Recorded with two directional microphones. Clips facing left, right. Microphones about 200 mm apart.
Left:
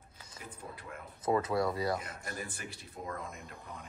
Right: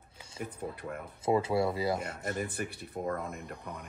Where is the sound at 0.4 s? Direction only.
55° right (ahead or behind).